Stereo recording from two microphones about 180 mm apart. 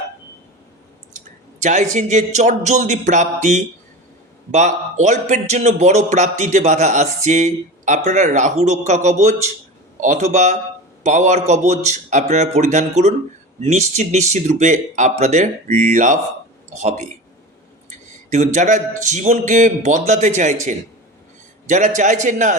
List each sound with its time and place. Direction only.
1.1 s a man's voice: 40° right (ahead or behind)